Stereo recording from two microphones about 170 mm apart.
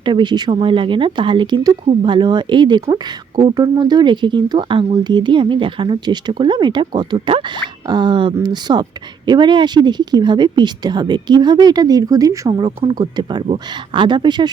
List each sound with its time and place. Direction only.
0.0 s speech: 25° right (ahead or behind)